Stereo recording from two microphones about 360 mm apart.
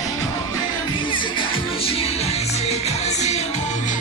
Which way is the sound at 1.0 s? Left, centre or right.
Centre.